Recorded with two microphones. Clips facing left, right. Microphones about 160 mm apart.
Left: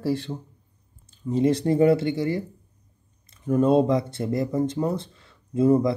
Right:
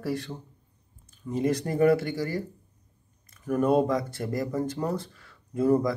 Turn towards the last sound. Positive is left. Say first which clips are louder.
# left 4 dB
turn(degrees=25)  # may be behind; listen again after turning